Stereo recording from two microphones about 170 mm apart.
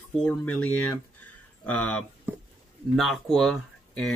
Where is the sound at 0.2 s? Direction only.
5° left (ahead or behind).